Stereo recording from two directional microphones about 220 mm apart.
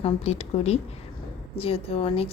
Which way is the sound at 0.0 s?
25° left (ahead or behind).